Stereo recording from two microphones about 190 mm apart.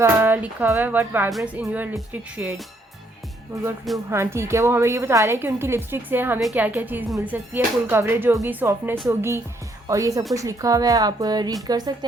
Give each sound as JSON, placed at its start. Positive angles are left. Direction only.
{"t": 0.0, "sound": "speech", "side_deg": -10}